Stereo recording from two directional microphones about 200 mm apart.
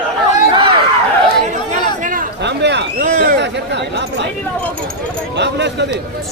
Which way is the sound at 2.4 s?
60° right (ahead or behind).